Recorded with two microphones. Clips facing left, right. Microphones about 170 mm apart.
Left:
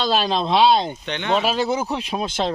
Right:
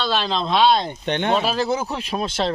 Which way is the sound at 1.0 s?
50° right (ahead or behind).